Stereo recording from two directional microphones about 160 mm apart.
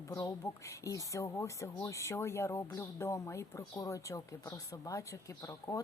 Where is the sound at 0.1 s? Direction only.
20° left (ahead or behind).